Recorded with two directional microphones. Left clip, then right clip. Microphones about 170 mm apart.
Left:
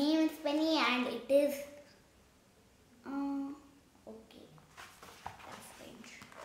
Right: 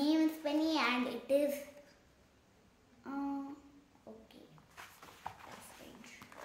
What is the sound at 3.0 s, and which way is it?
Humming, 15° right (ahead or behind).